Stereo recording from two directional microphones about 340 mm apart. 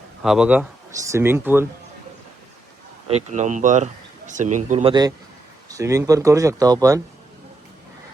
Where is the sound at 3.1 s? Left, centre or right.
Centre.